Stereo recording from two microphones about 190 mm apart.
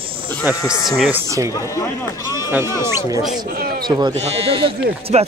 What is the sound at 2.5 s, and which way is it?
Speech, 15° right (ahead or behind).